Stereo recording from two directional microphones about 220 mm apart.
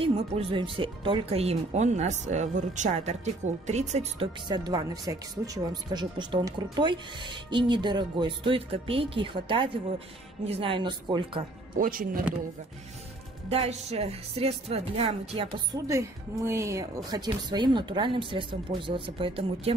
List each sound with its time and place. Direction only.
0.0 s speech: 25° right (ahead or behind)
11.7 s speech: 40° right (ahead or behind)
13.5 s speech: 30° right (ahead or behind)